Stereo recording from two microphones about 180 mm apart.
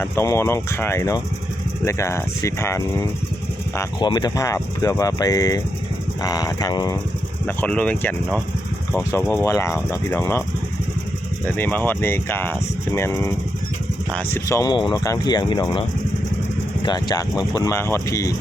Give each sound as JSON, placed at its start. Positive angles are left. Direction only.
{"t": 0.0, "sound": "speech", "side_deg": 15}
{"t": 7.4, "sound": "speech", "side_deg": 10}
{"t": 11.4, "sound": "speech", "side_deg": 10}
{"t": 14.4, "sound": "speech", "side_deg": 20}